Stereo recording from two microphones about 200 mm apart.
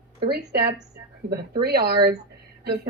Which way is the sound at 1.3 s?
50° right (ahead or behind).